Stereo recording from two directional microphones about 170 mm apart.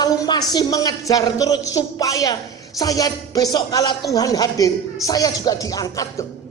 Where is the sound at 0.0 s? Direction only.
25° left (ahead or behind).